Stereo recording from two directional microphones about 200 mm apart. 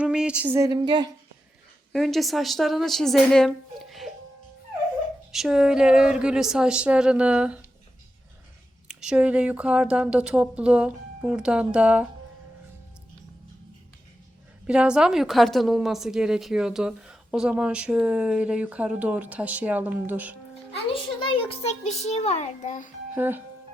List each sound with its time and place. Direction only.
0.0 s speech: 5° right (ahead or behind); by 1.1 s 20° right (ahead or behind)
1.9 s a woman's voice: centre (ahead or behind)
5.3 s a woman's voice: centre (ahead or behind)
8.9 s a woman's voice: 5° right (ahead or behind)
14.7 s a woman's voice: 5° right (ahead or behind)
21.4 s a child's voice: 30° left (ahead or behind)
23.1 s speech: 10° right (ahead or behind)